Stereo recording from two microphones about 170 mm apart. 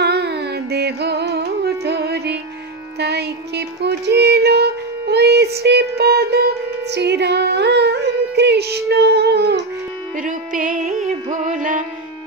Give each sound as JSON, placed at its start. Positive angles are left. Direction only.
{"t": 0.0, "sound": "carnatic music", "side_deg": -75}
{"t": 3.0, "sound": "music", "side_deg": -75}
{"t": 10.1, "sound": "music", "side_deg": -50}